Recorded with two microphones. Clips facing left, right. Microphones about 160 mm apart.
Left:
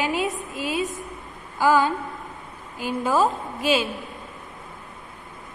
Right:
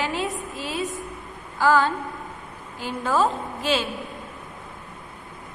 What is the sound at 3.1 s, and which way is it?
Speech, 5° left (ahead or behind).